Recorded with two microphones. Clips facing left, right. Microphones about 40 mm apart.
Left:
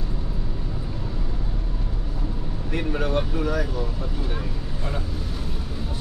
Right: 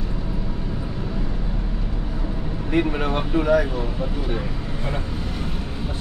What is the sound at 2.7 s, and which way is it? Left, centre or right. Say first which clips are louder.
Speech: right 3 dB; right.